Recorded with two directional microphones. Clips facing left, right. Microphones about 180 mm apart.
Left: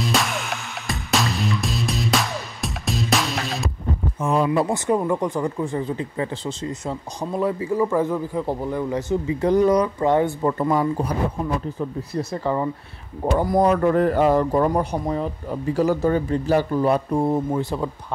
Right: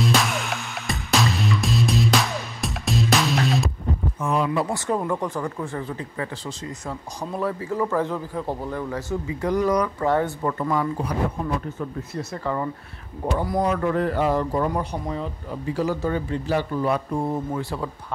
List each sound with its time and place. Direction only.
0.0 s music: centre (ahead or behind)
4.2 s a sound: 25° left (ahead or behind)
4.6 s speech: 15° left (ahead or behind)
10.6 s a man's voice: 30° left (ahead or behind)
13.4 s a man's voice: 45° left (ahead or behind)
17.5 s speech: 20° left (ahead or behind)